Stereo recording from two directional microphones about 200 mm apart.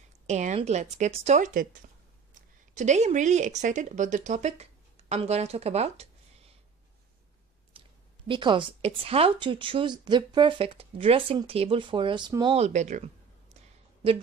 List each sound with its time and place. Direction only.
0.3 s speech: 35° right (ahead or behind)
8.3 s speech: 25° right (ahead or behind)
12.5 s speech: 35° right (ahead or behind)